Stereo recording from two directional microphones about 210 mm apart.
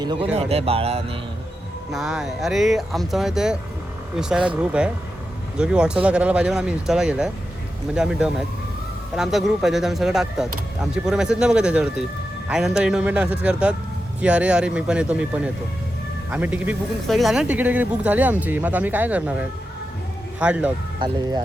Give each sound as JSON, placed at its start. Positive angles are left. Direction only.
{"t": 0.0, "sound": "speech", "side_deg": -20}
{"t": 1.9, "sound": "speech", "side_deg": 0}
{"t": 21.0, "sound": "speech", "side_deg": -20}